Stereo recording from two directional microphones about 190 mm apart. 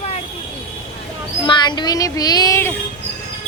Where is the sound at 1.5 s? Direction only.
25° left (ahead or behind).